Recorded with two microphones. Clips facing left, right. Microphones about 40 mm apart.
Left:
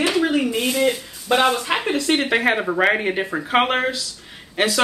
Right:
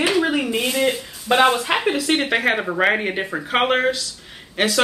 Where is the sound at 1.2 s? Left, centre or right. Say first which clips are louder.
Right 2 dB; right.